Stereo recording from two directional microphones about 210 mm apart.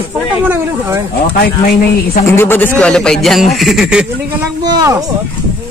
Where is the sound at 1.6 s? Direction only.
40° left (ahead or behind).